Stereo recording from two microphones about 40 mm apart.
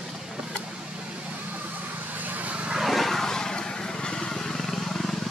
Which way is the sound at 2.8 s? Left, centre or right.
Centre.